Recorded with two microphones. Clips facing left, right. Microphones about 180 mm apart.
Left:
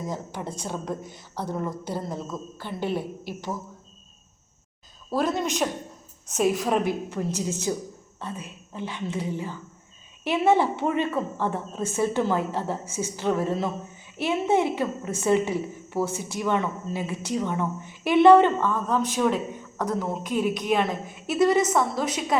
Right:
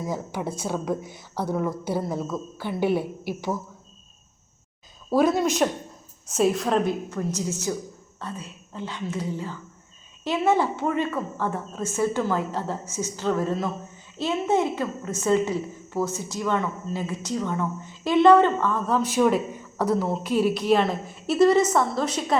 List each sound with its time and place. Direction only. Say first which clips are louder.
0.0 s a woman's voice: right 3 dB; 10° right (ahead or behind)
5.1 s a woman's voice: right 5 dB; 10° right (ahead or behind); by 18.7 s 15° left (ahead or behind)
18.7 s a woman's voice: right 1 dB; 5° right (ahead or behind)